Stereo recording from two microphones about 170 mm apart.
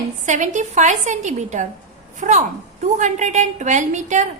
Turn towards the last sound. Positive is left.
turn(degrees=-45)  # may be behind; listen again after turning